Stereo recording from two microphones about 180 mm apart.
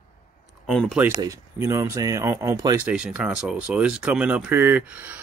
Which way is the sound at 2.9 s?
5° right (ahead or behind).